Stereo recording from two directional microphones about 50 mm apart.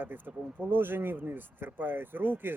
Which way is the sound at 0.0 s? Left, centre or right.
Right.